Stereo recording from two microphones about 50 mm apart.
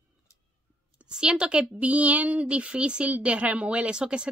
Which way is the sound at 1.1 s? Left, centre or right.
Centre.